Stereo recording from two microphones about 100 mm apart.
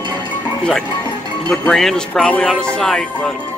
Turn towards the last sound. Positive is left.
turn(degrees=5)  # may be behind; listen again after turning